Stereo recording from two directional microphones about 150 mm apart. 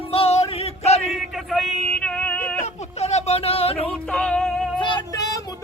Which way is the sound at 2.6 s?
45° left (ahead or behind).